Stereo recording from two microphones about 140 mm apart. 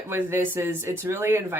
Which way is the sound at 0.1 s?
15° right (ahead or behind).